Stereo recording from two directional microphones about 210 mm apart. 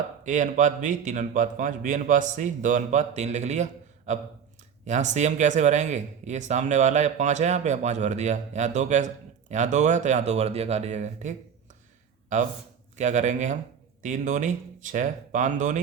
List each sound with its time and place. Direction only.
0.3 s speech: 35° right (ahead or behind)